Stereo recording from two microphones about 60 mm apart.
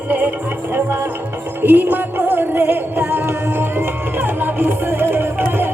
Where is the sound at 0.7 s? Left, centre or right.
Right.